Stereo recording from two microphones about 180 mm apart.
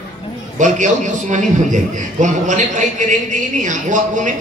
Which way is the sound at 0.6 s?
40° right (ahead or behind).